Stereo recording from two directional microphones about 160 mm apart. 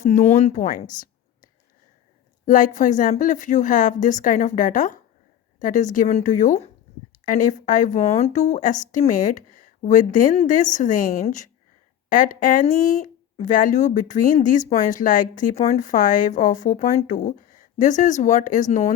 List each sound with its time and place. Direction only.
0.0 s a woman's voice: 50° left (ahead or behind)
2.5 s speech: 55° left (ahead or behind)